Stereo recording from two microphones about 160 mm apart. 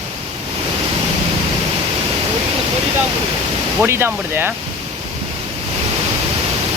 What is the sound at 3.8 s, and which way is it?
Speech, 15° right (ahead or behind).